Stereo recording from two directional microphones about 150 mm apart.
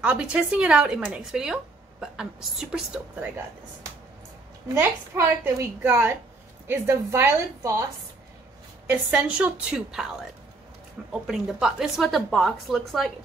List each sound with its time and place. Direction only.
0.0 s speech: 5° right (ahead or behind)
4.7 s speech: 15° right (ahead or behind)
8.8 s speech: 10° right (ahead or behind)
11.2 s a woman's voice: 5° right (ahead or behind)